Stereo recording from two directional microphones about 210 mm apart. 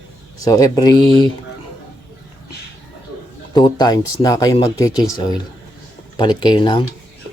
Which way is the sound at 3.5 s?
20° left (ahead or behind).